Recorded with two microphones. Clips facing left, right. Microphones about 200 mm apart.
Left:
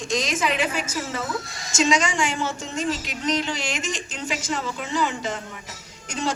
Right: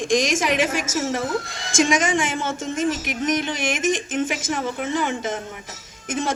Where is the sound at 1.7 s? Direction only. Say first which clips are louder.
Right 2 dB; 50° right (ahead or behind).